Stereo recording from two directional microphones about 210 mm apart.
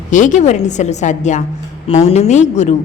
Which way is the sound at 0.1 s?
35° left (ahead or behind).